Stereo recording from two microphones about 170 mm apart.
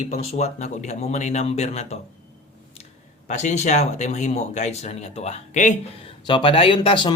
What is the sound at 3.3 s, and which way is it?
Speech, 45° left (ahead or behind).